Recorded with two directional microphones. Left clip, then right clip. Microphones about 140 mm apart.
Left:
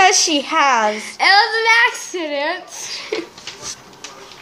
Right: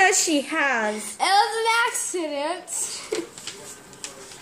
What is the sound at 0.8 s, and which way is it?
A woman's voice, 5° right (ahead or behind).